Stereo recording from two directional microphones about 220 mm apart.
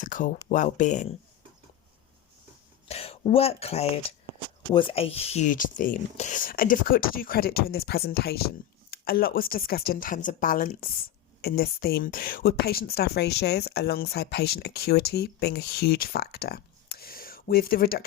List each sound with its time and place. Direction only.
0.0 s speech: 35° left (ahead or behind)
2.9 s speech: 25° left (ahead or behind); by 18.0 s 40° left (ahead or behind)